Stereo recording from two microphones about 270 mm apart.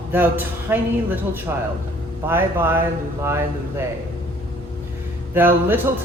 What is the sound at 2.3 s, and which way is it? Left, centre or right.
Speech, centre.